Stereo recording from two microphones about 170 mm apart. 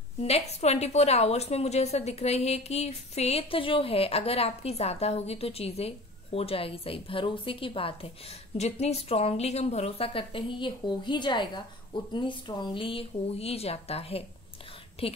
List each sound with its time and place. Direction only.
0.2 s a woman's voice: 40° left (ahead or behind)